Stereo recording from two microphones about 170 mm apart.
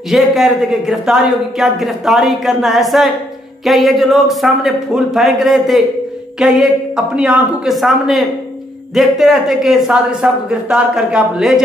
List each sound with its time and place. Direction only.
0.1 s a man's voice: centre (ahead or behind)